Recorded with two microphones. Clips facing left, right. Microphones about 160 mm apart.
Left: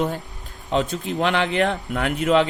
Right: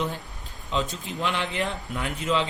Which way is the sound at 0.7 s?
65° left (ahead or behind).